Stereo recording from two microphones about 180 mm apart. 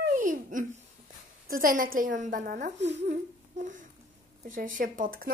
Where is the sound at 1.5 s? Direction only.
50° right (ahead or behind).